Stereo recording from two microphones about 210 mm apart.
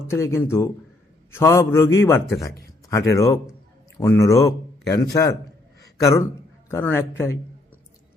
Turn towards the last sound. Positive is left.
turn(degrees=10)  # may be behind; listen again after turning